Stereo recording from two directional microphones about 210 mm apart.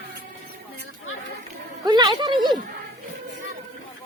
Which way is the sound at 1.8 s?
20° right (ahead or behind).